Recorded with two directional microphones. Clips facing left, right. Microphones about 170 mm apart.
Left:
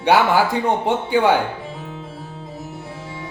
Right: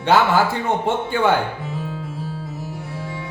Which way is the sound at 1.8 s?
20° left (ahead or behind).